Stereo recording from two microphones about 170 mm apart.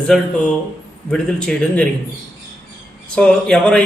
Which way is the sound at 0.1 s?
Centre (ahead or behind).